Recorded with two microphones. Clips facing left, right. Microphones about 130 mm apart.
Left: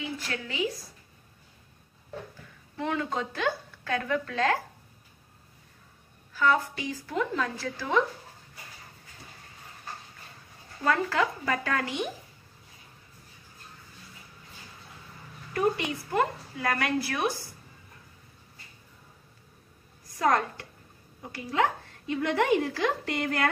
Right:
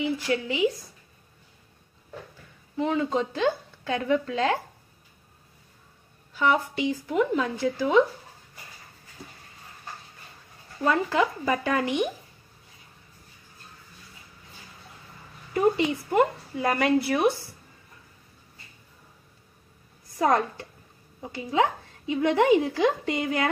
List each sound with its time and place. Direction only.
0.0 s a woman's voice: 20° right (ahead or behind)
2.8 s a woman's voice: 20° right (ahead or behind)
6.3 s a woman's voice: 20° right (ahead or behind)
10.8 s a woman's voice: 20° right (ahead or behind)
15.5 s a woman's voice: 20° right (ahead or behind)
20.2 s a woman's voice: 20° right (ahead or behind)